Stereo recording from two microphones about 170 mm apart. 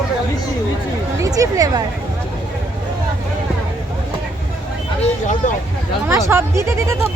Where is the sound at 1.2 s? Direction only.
20° right (ahead or behind).